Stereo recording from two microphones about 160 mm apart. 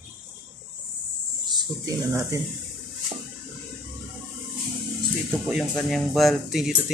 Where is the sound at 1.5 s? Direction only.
20° right (ahead or behind).